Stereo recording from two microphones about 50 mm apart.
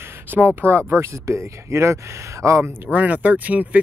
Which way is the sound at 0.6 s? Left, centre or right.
Right.